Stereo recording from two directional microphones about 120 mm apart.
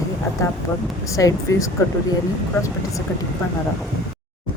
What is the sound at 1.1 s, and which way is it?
Speech, 25° left (ahead or behind).